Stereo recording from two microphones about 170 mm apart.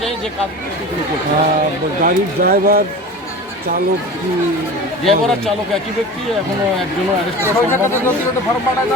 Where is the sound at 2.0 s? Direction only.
60° right (ahead or behind).